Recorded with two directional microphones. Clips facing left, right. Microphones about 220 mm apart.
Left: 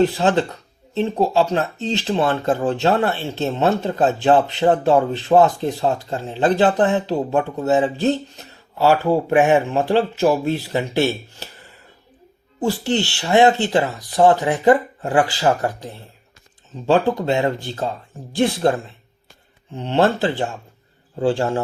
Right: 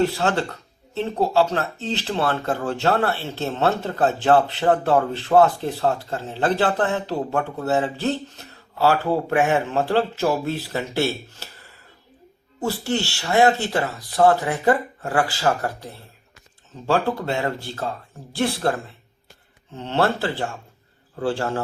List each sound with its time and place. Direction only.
0.0 s speech: 20° left (ahead or behind)
12.5 s speech: 20° left (ahead or behind)
19.7 s speech: 15° left (ahead or behind)